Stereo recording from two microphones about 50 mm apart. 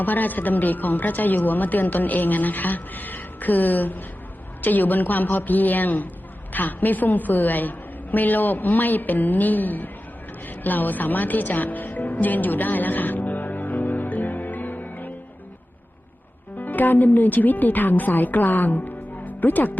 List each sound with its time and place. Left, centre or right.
0.0 s a woman's voice: left
10.4 s music: left
16.6 s speech: left